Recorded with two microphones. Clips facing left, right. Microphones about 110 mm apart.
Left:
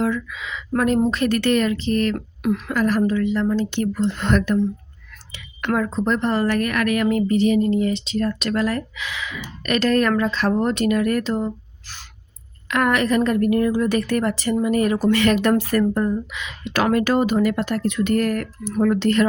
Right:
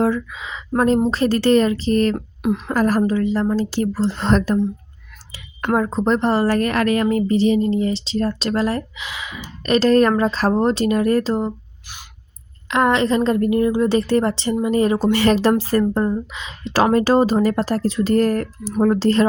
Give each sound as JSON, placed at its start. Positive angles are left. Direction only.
{"t": 0.0, "sound": "a woman's voice", "side_deg": -35}
{"t": 2.1, "sound": "speech", "side_deg": -20}
{"t": 2.6, "sound": "a woman's voice", "side_deg": -40}
{"t": 12.6, "sound": "a woman's voice", "side_deg": -25}